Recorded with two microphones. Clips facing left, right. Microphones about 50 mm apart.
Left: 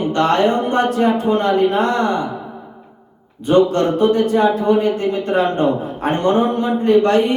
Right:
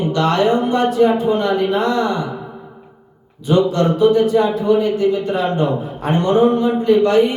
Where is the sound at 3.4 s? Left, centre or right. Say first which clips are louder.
Left 1 dB; left.